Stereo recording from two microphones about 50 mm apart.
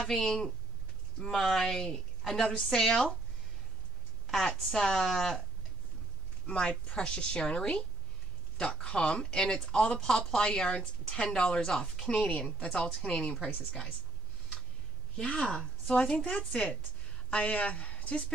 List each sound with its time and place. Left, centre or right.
0.0 s a woman's voice: centre
4.3 s speech: centre
6.4 s speech: centre
15.1 s speech: centre